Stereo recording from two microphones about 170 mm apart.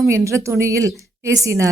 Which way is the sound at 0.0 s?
15° right (ahead or behind).